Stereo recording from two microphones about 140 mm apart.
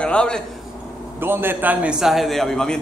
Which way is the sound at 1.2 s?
15° right (ahead or behind).